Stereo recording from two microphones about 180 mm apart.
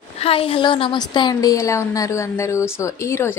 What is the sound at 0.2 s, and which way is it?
A woman's voice, 30° left (ahead or behind).